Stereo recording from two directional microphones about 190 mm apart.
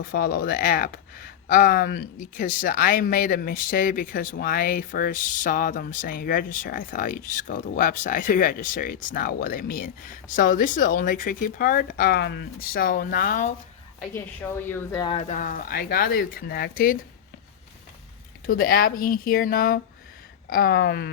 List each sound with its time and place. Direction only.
0.0 s speech: 50° left (ahead or behind)
14.7 s speech: 20° left (ahead or behind); by 17.0 s 50° left (ahead or behind)
18.4 s speech: 50° left (ahead or behind)